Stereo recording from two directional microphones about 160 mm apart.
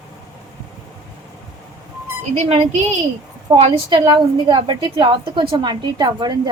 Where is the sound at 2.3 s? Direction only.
40° right (ahead or behind).